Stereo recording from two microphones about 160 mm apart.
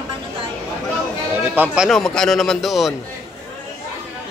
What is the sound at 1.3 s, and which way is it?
Speech, 10° right (ahead or behind).